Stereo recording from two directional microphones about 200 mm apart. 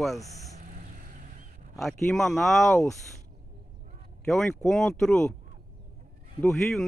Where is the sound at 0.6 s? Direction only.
45° right (ahead or behind).